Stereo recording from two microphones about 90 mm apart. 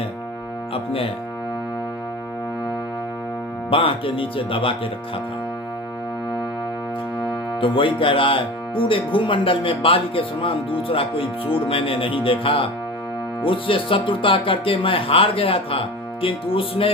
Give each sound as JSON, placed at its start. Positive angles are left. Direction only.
{"t": 0.7, "sound": "music", "side_deg": 90}
{"t": 3.7, "sound": "speech", "side_deg": 80}
{"t": 7.6, "sound": "speech", "side_deg": 70}
{"t": 16.2, "sound": "music", "side_deg": 90}